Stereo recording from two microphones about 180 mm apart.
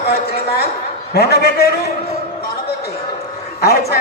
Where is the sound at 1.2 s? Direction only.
65° left (ahead or behind).